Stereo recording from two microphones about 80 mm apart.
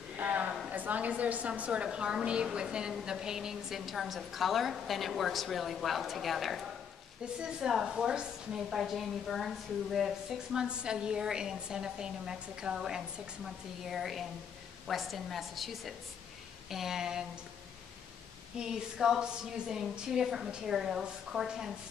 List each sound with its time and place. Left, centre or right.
0.2 s a sound: centre
0.7 s a woman's voice: centre
18.6 s a woman's voice: centre